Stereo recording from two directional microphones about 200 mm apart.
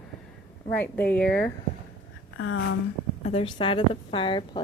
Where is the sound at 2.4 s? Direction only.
90° left.